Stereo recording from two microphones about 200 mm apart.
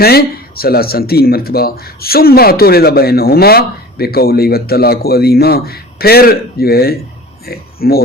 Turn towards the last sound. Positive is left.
turn(degrees=50)  # may be behind; listen again after turning